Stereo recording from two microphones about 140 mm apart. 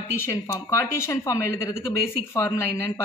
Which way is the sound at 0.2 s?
20° left (ahead or behind).